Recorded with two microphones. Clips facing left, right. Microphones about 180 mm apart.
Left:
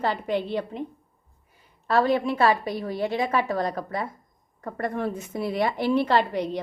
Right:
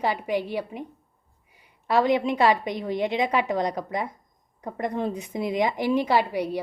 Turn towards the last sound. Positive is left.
turn(degrees=-10)  # may be behind; listen again after turning